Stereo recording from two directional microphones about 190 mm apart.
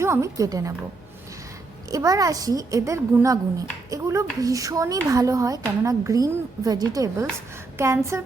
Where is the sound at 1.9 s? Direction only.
20° right (ahead or behind).